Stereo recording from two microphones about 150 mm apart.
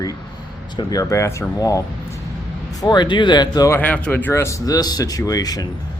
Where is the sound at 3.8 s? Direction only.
10° left (ahead or behind); by 5.7 s 25° left (ahead or behind).